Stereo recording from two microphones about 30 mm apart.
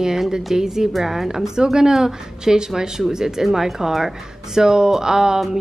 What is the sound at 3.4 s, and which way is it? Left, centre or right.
Speech, centre.